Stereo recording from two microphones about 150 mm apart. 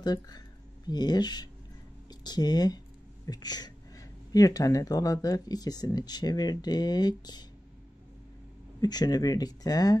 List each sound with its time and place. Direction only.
0.0 s speech: 25° left (ahead or behind)
8.8 s speech: 25° left (ahead or behind)